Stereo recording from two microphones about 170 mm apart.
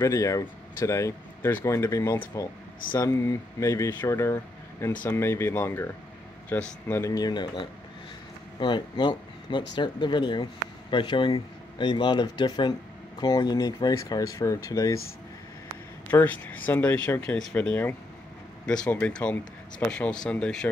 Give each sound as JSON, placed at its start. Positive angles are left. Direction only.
{"t": 0.0, "sound": "speech", "side_deg": 20}
{"t": 16.1, "sound": "speech", "side_deg": 10}